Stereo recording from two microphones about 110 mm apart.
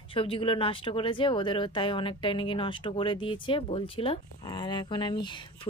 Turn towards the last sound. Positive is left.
turn(degrees=45)  # may be behind; listen again after turning